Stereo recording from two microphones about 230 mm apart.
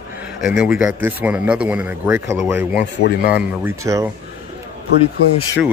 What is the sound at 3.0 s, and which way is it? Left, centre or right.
Speech, left.